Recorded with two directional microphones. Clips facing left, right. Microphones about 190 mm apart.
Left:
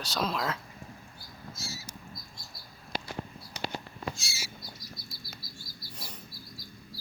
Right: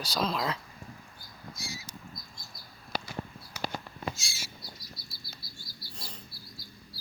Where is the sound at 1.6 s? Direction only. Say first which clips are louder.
Right 1 dB; 15° right (ahead or behind).